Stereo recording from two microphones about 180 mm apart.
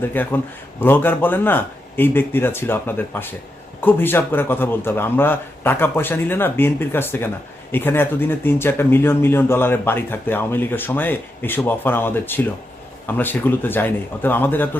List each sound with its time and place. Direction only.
0.1 s speech: 10° left (ahead or behind)